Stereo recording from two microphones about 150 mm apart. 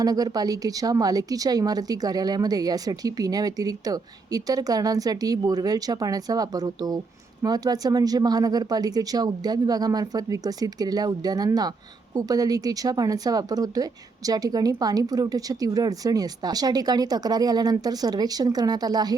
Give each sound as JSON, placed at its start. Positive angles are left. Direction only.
{"t": 0.0, "sound": "a woman's voice", "side_deg": -25}